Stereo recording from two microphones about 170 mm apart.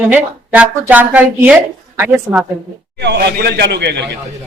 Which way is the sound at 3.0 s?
80° right.